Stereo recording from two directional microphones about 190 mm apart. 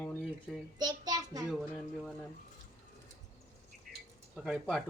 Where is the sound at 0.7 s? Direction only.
20° right (ahead or behind).